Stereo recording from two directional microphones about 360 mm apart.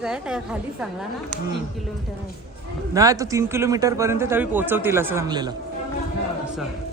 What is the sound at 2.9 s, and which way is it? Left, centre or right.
Speech, centre.